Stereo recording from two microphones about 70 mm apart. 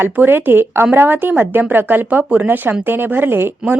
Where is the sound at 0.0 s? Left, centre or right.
Right.